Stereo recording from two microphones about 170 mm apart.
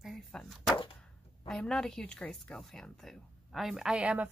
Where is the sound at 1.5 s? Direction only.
5° left (ahead or behind).